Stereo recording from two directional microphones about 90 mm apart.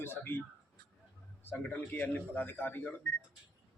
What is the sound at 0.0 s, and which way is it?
Speech, 25° left (ahead or behind).